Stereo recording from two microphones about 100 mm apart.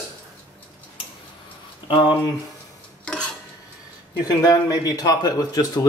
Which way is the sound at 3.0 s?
10° left (ahead or behind).